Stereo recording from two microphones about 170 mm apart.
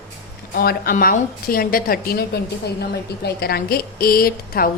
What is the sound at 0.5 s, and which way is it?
A woman's voice, 65° left (ahead or behind).